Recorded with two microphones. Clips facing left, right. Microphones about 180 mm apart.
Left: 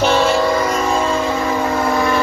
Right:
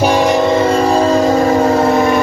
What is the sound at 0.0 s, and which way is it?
Train, 15° right (ahead or behind).